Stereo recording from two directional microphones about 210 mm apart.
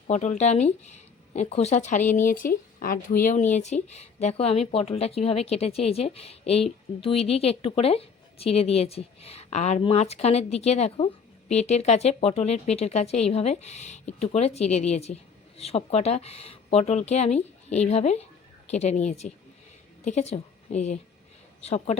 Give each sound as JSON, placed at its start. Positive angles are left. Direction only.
{"t": 0.1, "sound": "a woman's voice", "side_deg": 35}